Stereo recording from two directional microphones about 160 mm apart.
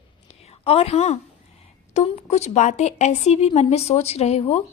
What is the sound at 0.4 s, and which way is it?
A woman's voice, 40° left (ahead or behind).